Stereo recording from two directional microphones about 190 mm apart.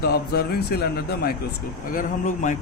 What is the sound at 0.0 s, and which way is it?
Speech, 55° left (ahead or behind).